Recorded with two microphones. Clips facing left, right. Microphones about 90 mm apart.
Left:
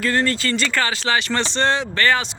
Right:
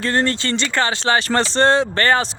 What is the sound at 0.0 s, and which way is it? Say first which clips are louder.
Speech: right 1 dB; 35° right (ahead or behind).